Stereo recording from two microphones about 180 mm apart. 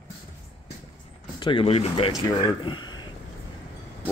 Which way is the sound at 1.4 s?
30° left (ahead or behind).